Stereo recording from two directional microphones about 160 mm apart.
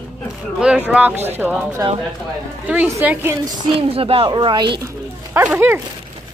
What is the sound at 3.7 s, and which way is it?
Speech, 35° right (ahead or behind).